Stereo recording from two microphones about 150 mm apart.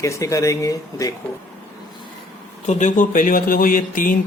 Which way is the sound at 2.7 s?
55° left (ahead or behind).